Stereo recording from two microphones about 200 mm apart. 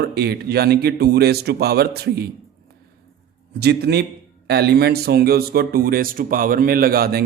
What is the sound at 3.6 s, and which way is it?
A man's voice, 55° right (ahead or behind).